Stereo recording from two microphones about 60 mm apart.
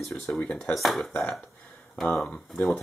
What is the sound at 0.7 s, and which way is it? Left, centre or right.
Speech, centre.